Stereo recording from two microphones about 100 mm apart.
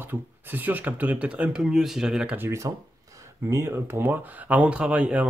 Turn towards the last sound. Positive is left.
turn(degrees=-10)  # may be behind; listen again after turning